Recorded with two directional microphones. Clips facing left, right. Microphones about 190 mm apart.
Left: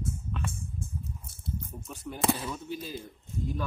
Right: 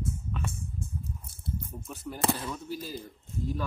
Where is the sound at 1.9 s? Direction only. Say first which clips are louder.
Left 1 dB; centre (ahead or behind).